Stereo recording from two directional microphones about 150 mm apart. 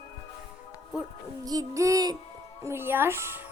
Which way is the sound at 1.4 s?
25° right (ahead or behind).